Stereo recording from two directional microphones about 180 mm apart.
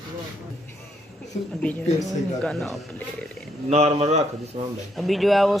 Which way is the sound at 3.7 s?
35° right (ahead or behind).